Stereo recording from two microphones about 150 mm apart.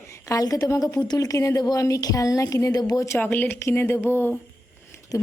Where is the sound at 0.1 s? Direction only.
20° left (ahead or behind).